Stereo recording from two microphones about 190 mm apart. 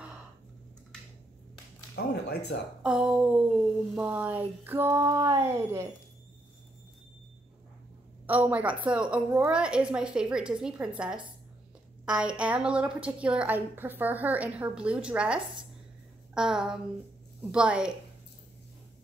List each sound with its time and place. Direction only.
2.0 s speech: 55° left (ahead or behind)
2.8 s a woman's voice: 5° right (ahead or behind)
3.9 s a sound: 5° right (ahead or behind)
8.3 s a woman's voice: 10° right (ahead or behind)